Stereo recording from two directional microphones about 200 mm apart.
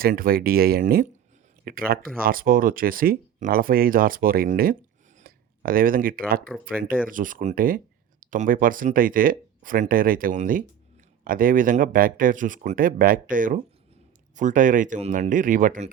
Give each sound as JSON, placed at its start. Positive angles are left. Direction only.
{"t": 0.0, "sound": "speech", "side_deg": -45}